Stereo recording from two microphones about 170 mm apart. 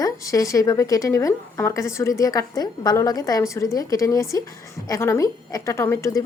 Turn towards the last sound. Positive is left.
turn(degrees=20)  # may be behind; listen again after turning